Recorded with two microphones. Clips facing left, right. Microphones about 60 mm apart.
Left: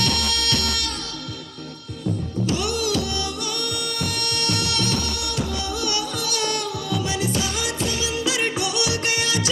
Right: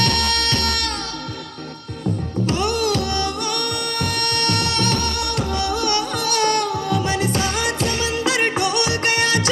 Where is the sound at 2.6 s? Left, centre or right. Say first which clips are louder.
Right 4 dB; right.